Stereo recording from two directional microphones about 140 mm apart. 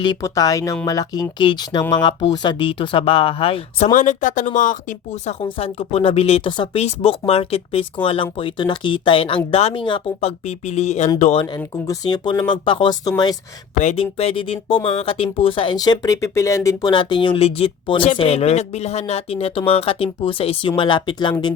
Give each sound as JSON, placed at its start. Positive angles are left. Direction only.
{"t": 0.0, "sound": "speech", "side_deg": 30}
{"t": 3.9, "sound": "speech", "side_deg": 65}
{"t": 5.4, "sound": "speech", "side_deg": 40}
{"t": 11.3, "sound": "speech", "side_deg": 30}
{"t": 13.9, "sound": "speech", "side_deg": 45}
{"t": 16.9, "sound": "speech", "side_deg": 35}